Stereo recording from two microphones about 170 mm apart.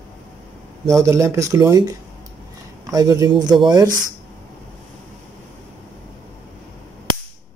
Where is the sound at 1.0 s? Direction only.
15° right (ahead or behind).